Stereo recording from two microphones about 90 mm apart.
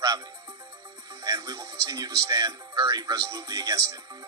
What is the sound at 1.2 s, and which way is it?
Speech, 40° right (ahead or behind).